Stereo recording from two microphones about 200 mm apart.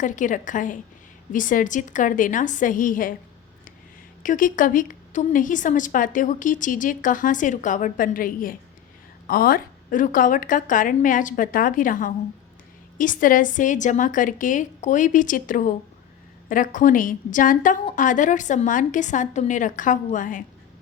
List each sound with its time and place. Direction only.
0.0 s a woman's voice: 40° left (ahead or behind)
4.2 s a woman's voice: 40° left (ahead or behind)